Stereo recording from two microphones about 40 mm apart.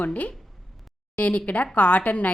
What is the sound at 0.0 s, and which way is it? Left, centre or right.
A woman's voice, left.